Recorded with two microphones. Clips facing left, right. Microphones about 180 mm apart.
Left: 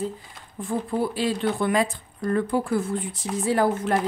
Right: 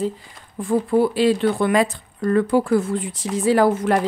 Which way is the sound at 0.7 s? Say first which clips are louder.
Right 8 dB; 80° right.